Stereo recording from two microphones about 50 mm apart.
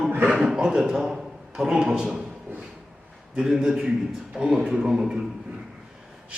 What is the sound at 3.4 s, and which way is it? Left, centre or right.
A man's voice, centre.